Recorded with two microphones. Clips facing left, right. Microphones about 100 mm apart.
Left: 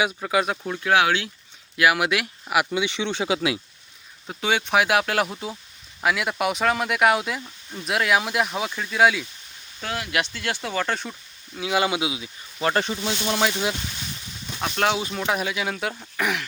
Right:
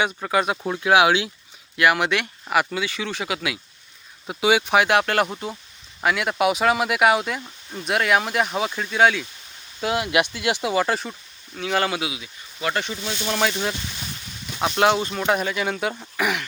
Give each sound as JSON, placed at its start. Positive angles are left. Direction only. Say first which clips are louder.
{"t": 0.0, "sound": "speech", "louder": "right 1 dB", "side_deg": 0}
{"t": 0.7, "sound": "speech", "louder": "right 4 dB", "side_deg": -15}
{"t": 1.7, "sound": "speech", "louder": "right 1 dB", "side_deg": 5}
{"t": 2.7, "sound": "speech", "louder": "left 2 dB", "side_deg": 20}
{"t": 4.3, "sound": "speech", "louder": "right 4 dB", "side_deg": -5}
{"t": 7.4, "sound": "speech", "louder": "right 2 dB", "side_deg": -10}
{"t": 7.9, "sound": "speech", "louder": "right 1 dB", "side_deg": 0}
{"t": 9.8, "sound": "speech", "louder": "right 5 dB", "side_deg": -20}
{"t": 11.5, "sound": "speech", "louder": "even", "side_deg": 10}
{"t": 13.2, "sound": "speech", "louder": "right 1 dB", "side_deg": 5}
{"t": 14.6, "sound": "speech", "louder": "right 4 dB", "side_deg": -5}